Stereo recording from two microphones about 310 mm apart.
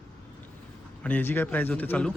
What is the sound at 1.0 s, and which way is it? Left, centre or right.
A man's voice, centre.